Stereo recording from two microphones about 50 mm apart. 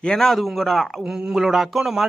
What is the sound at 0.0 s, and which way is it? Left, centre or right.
Speech, centre.